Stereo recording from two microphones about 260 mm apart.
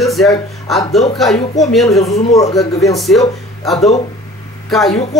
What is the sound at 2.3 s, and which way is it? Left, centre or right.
Speech, centre.